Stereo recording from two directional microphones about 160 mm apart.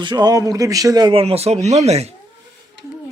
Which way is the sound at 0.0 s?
25° right (ahead or behind).